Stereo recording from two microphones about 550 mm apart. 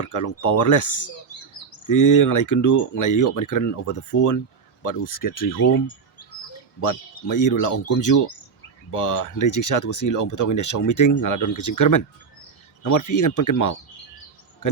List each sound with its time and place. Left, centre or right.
0.0 s speech: left
6.8 s speech: left